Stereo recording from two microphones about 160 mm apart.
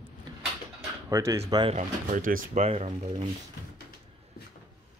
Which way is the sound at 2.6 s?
40° right (ahead or behind).